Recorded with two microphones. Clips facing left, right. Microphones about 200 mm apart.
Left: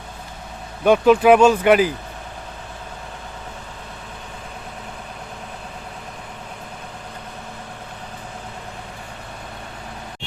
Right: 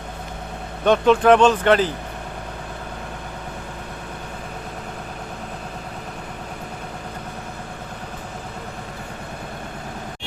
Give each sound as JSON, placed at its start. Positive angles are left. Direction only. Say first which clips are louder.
{"t": 0.9, "sound": "speech", "louder": "left 2 dB", "side_deg": 5}